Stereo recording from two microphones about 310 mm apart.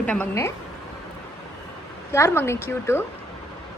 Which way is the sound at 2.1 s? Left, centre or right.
Centre.